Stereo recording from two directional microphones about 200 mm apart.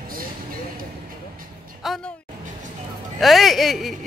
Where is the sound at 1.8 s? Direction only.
Centre (ahead or behind).